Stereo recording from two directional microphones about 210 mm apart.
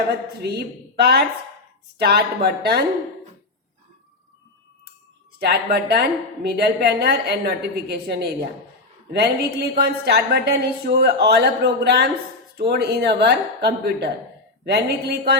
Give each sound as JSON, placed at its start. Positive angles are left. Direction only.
{"t": 0.4, "sound": "a woman's voice", "side_deg": -50}
{"t": 5.4, "sound": "a woman's voice", "side_deg": -50}